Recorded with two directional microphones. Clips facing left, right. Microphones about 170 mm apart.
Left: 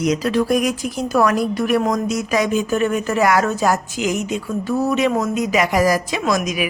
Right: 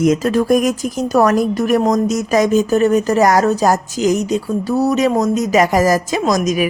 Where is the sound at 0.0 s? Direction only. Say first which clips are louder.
Right 4 dB; 50° right (ahead or behind).